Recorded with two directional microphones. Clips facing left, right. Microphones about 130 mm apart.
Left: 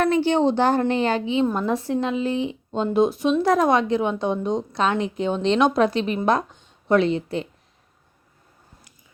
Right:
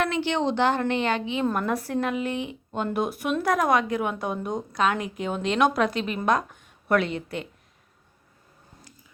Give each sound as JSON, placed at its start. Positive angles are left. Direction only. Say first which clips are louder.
{"t": 0.0, "sound": "a woman's voice", "louder": "left 6 dB", "side_deg": 40}